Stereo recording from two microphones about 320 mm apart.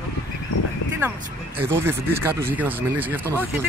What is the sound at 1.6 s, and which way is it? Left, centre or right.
Speech, centre.